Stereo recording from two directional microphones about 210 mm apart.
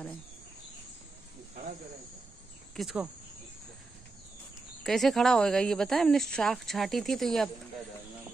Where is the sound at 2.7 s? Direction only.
5° right (ahead or behind).